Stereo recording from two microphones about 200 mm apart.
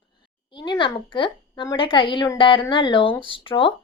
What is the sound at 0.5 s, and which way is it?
A woman's voice, 25° left (ahead or behind).